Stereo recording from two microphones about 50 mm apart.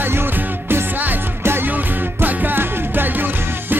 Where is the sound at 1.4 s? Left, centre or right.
Right.